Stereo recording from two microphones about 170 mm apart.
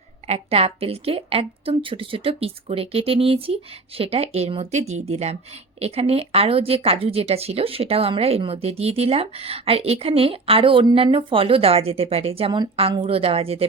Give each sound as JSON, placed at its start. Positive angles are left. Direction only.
{"t": 0.3, "sound": "speech", "side_deg": -35}